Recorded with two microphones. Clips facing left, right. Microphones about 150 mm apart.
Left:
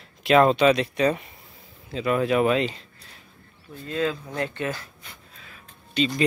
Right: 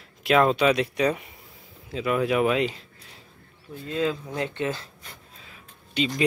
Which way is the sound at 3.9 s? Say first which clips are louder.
Even; 15° right (ahead or behind).